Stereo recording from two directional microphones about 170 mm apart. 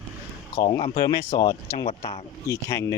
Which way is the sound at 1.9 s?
35° left (ahead or behind).